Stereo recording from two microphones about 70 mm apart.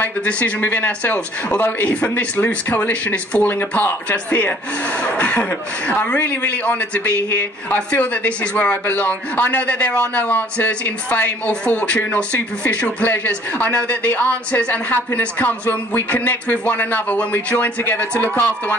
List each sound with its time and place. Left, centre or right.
0.0 s speech: left